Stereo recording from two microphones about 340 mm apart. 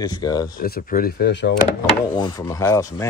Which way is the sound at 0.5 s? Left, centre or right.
Left.